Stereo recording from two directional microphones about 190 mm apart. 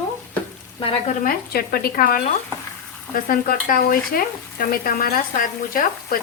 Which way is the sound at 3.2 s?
50° left (ahead or behind).